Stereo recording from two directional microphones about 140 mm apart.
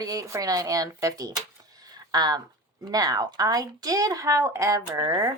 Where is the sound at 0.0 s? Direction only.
25° right (ahead or behind).